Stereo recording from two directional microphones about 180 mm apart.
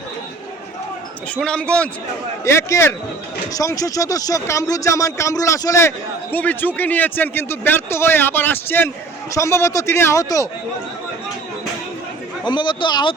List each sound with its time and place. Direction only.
1.4 s a man's voice: 5° left (ahead or behind)
2.4 s speech: 15° left (ahead or behind)
12.5 s speech: 25° left (ahead or behind)